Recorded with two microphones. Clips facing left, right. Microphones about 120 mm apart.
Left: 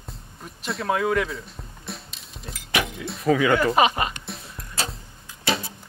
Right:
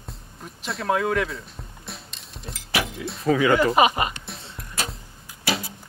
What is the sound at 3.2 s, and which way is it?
Speech, 30° right (ahead or behind).